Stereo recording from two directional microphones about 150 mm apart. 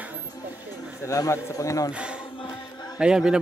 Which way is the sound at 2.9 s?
5° right (ahead or behind).